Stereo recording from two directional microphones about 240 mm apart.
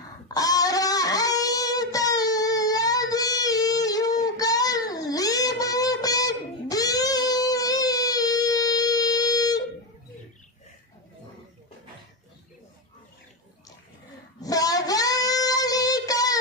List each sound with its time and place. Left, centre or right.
0.3 s guitar: centre
14.4 s child singing: centre